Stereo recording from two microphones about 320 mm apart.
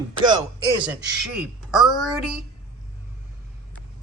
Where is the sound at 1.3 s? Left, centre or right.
Centre.